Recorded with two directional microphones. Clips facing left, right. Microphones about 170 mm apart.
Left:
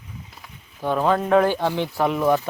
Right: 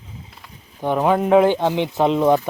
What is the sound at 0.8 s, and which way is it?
Speech, 15° right (ahead or behind).